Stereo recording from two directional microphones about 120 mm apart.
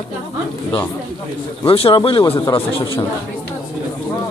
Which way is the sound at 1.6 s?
50° left (ahead or behind).